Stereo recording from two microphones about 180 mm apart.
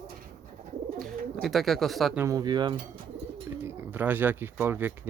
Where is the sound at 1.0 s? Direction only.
Centre (ahead or behind).